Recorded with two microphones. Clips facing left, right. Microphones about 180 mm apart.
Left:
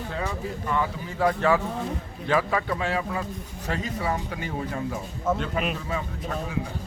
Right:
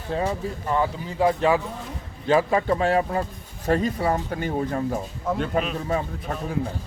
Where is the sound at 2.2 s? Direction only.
30° right (ahead or behind).